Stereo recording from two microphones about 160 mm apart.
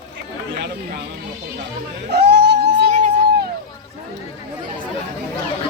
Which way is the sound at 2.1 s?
90° right.